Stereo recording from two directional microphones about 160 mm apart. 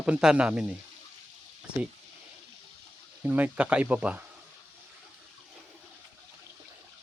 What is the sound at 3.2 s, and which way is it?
Speech, 10° right (ahead or behind).